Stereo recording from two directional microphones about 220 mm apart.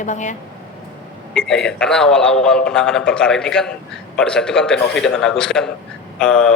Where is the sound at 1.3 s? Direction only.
5° left (ahead or behind).